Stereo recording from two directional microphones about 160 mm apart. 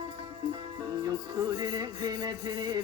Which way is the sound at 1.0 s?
25° right (ahead or behind).